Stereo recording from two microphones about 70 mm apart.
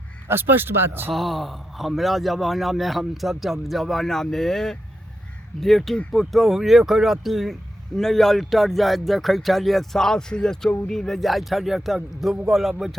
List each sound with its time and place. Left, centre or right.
0.3 s speech: right
1.1 s speech: centre